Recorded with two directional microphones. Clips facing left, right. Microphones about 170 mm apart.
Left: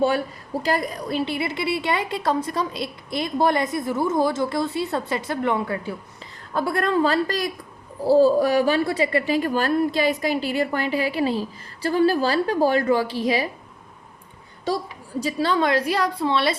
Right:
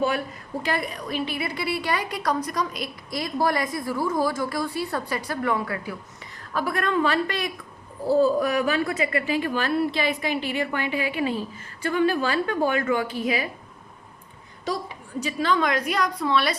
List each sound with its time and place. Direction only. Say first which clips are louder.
0.6 s a woman's voice: left 4 dB; 40° left (ahead or behind)
15.2 s a woman's voice: left 2 dB; 35° left (ahead or behind)